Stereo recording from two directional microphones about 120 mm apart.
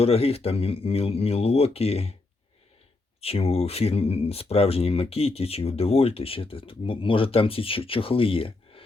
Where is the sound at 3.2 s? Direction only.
55° left (ahead or behind).